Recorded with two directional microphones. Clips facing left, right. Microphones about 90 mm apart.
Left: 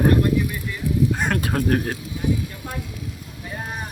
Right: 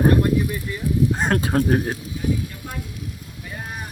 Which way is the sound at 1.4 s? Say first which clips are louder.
Right 2 dB; 25° right (ahead or behind).